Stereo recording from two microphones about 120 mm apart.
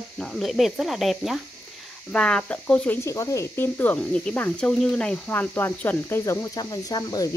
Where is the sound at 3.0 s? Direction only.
25° left (ahead or behind).